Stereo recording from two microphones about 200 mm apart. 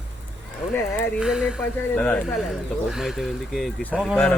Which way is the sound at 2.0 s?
5° left (ahead or behind).